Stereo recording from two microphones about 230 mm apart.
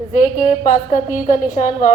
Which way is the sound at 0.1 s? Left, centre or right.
Left.